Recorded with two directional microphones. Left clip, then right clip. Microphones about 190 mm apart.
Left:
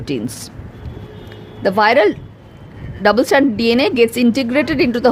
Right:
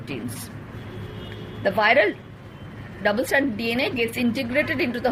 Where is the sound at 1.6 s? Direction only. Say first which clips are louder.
Left 6 dB; 50° left (ahead or behind).